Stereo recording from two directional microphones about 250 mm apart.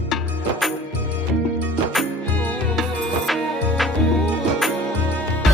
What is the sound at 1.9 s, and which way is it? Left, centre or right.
Music, centre.